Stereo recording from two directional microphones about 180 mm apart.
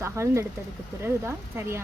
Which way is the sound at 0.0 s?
15° right (ahead or behind).